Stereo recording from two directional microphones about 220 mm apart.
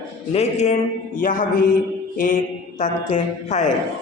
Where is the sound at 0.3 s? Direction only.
30° left (ahead or behind).